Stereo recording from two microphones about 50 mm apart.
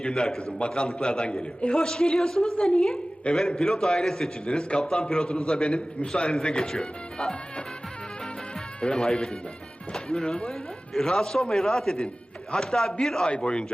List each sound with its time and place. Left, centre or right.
0.0 s a woman's voice: centre
8.8 s a woman's voice: centre